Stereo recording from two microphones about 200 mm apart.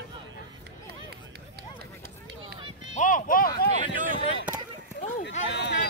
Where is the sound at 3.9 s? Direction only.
45° right (ahead or behind).